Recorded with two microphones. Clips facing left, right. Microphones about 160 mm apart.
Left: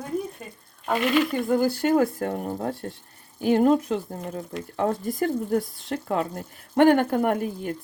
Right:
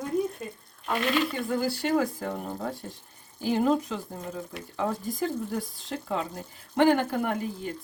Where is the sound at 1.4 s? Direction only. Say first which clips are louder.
Left 6 dB; 50° left (ahead or behind).